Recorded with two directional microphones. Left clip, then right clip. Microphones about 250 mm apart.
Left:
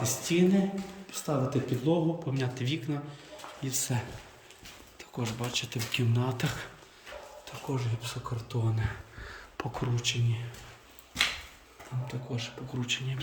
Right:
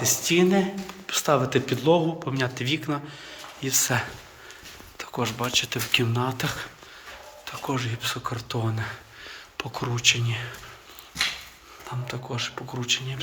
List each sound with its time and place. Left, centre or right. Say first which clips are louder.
0.0 s speech: right 6 dB; centre
7.8 s speech: right 10 dB; centre
9.2 s a sound: right 4 dB; left
9.8 s speech: right 12 dB; centre
12.0 s speech: right 7 dB; centre